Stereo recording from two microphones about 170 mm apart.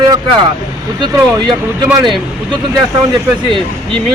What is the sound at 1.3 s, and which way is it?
Speech, 25° right (ahead or behind).